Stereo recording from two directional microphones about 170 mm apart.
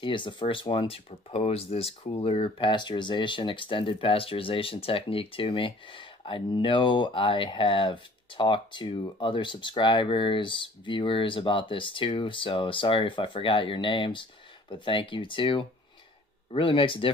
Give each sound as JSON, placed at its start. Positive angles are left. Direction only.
{"t": 0.0, "sound": "speech", "side_deg": 30}